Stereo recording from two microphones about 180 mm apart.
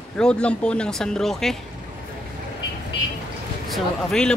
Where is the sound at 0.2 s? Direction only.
5° left (ahead or behind).